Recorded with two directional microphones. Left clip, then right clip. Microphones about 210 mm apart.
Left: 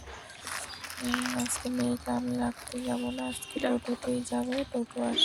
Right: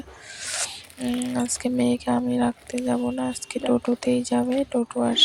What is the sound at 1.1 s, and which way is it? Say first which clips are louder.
Speech: right 4 dB; 30° right (ahead or behind).